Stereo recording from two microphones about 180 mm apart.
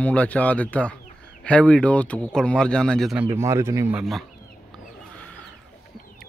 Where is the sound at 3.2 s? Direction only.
15° right (ahead or behind).